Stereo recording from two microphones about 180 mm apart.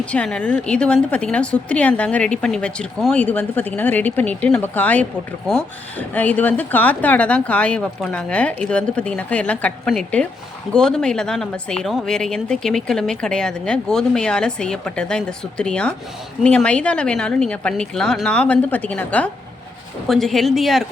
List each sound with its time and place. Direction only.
0.0 s speech: 5° left (ahead or behind)